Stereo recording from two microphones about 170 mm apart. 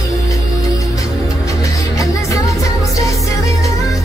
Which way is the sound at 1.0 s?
20° left (ahead or behind).